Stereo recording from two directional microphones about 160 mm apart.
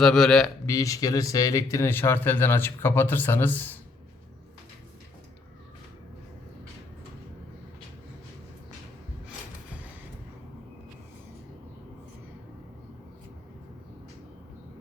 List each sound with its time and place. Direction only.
0.0 s a man's voice: 5° left (ahead or behind)
0.6 s speech: 20° left (ahead or behind)